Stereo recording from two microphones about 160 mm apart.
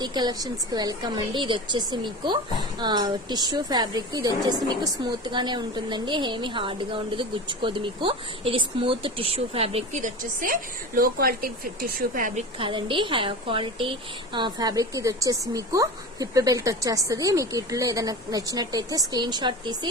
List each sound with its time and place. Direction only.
0.0 s a woman's voice: 25° right (ahead or behind)